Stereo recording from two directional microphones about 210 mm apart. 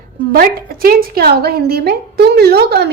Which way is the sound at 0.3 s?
45° right (ahead or behind).